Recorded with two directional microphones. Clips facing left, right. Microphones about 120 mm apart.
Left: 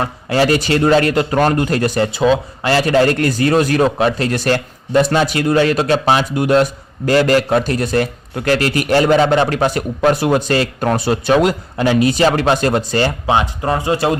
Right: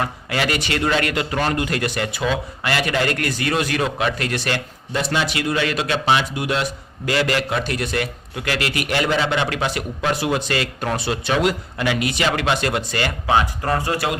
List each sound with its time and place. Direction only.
0.0 s a man's voice: 35° left (ahead or behind)